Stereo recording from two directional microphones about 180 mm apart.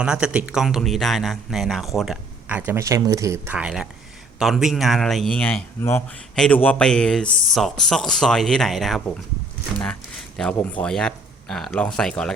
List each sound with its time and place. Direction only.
0.0 s speech: 5° right (ahead or behind)